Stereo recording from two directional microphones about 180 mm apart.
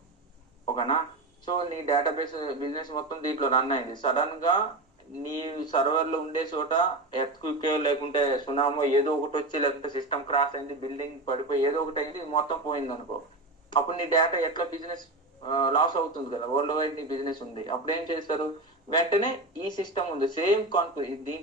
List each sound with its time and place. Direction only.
1.5 s speech: 25° left (ahead or behind)